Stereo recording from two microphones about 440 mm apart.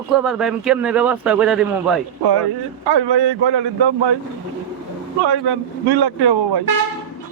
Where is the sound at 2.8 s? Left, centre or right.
Right.